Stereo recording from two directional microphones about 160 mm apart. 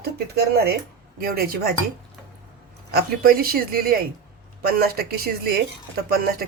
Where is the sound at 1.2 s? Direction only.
70° right (ahead or behind).